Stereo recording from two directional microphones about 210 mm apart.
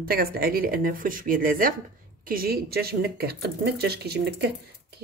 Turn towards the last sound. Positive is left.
turn(degrees=-50)  # may be behind; listen again after turning